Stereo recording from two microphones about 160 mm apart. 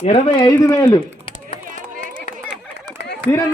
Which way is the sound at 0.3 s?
20° left (ahead or behind).